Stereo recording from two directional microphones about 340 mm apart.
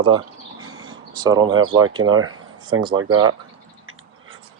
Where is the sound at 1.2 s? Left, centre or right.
Centre.